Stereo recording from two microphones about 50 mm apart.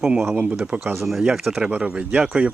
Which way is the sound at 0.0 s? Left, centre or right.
Centre.